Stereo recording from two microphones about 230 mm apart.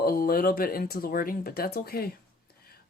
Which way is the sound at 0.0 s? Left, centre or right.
Left.